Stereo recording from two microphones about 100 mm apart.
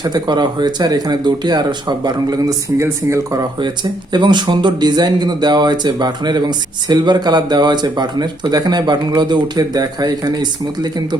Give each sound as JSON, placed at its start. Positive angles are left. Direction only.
{"t": 0.0, "sound": "speech", "side_deg": -45}
{"t": 2.8, "sound": "speech", "side_deg": -30}
{"t": 4.1, "sound": "speech", "side_deg": -50}